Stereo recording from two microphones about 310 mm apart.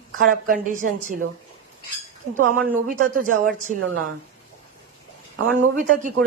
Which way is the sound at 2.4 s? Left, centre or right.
Right.